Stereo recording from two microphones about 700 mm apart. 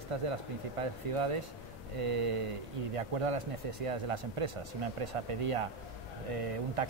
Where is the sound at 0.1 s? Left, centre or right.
Right.